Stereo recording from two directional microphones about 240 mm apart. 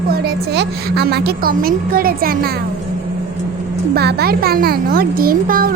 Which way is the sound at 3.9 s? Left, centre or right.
Right.